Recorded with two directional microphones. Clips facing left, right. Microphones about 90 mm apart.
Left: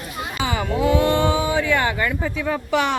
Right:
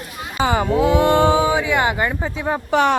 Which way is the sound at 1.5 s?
15° right (ahead or behind).